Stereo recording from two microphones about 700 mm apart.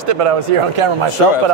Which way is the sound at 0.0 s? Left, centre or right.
Right.